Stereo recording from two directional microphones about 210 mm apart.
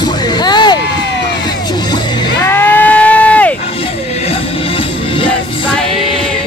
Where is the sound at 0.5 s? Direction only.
20° left (ahead or behind).